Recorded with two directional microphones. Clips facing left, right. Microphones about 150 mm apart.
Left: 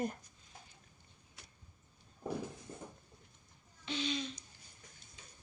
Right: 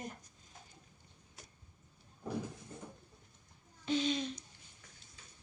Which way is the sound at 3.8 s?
45° right (ahead or behind).